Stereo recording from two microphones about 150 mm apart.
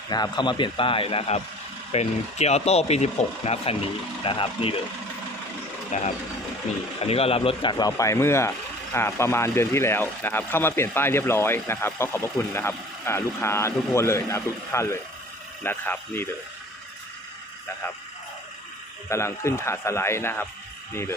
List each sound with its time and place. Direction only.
0.1 s speech: 30° left (ahead or behind)
5.9 s speech: 50° left (ahead or behind); by 16.3 s 15° left (ahead or behind)
19.0 s speech: 20° left (ahead or behind)